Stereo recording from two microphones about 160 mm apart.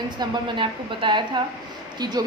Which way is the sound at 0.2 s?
30° right (ahead or behind).